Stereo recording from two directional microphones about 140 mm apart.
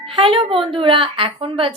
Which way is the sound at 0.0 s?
40° right (ahead or behind).